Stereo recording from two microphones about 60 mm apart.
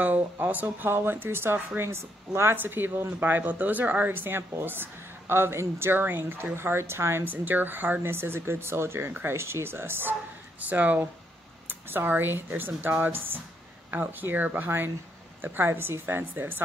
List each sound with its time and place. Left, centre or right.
0.0 s speech: right
2.5 s speech: right
7.2 s speech: right
10.6 s speech: right